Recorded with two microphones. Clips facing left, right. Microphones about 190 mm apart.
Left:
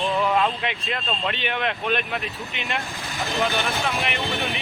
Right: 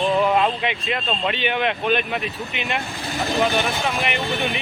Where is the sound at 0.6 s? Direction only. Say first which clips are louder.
Right 4 dB; centre (ahead or behind).